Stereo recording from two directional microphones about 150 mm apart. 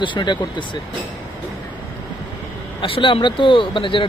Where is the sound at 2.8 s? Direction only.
35° left (ahead or behind).